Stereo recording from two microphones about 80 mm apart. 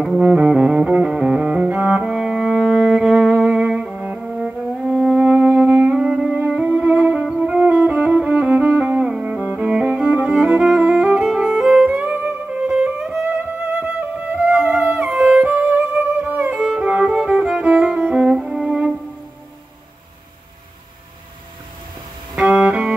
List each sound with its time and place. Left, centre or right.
0.2 s cello: centre
11.2 s music: centre
13.4 s music: centre
16.5 s music: centre
22.3 s music: centre